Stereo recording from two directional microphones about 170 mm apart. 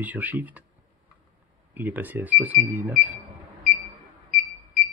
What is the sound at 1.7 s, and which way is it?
Speech, 10° right (ahead or behind).